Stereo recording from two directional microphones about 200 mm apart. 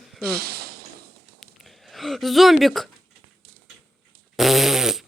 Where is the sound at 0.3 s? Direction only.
50° right (ahead or behind).